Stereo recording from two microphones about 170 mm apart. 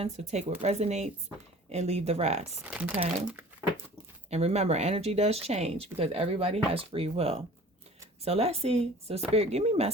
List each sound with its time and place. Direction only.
0.0 s speech: 40° right (ahead or behind)
2.6 s speech: 10° right (ahead or behind)
4.3 s speech: 35° right (ahead or behind)